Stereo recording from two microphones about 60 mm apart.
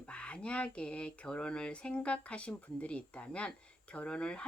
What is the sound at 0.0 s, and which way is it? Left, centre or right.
Speech, centre.